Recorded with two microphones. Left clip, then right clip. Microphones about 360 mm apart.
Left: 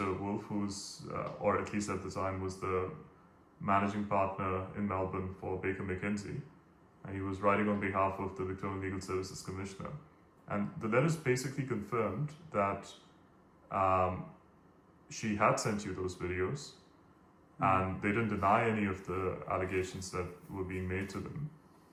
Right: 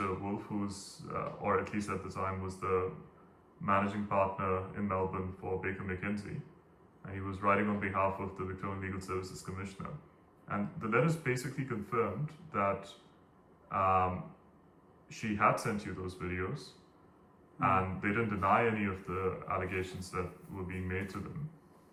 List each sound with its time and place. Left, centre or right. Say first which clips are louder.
0.0 s speech: even; centre
15.1 s speech: even; centre
17.6 s speech: even; centre